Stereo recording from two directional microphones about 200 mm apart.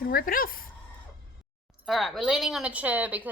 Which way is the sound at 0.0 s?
45° left (ahead or behind).